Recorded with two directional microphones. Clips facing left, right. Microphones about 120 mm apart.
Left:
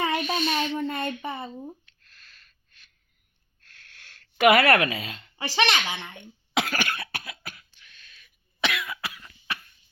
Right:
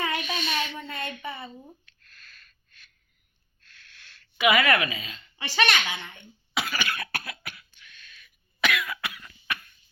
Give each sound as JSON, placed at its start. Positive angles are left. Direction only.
{"t": 0.0, "sound": "a sound", "side_deg": 40}
{"t": 0.8, "sound": "a sound", "side_deg": 45}
{"t": 4.4, "sound": "speech", "side_deg": 55}
{"t": 5.5, "sound": "speech", "side_deg": 25}
{"t": 6.1, "sound": "cough", "side_deg": 65}
{"t": 7.0, "sound": "cough", "side_deg": 20}
{"t": 7.4, "sound": "cough", "side_deg": 40}